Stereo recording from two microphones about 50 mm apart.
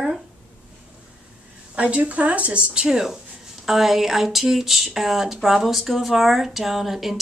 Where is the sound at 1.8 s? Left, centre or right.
Right.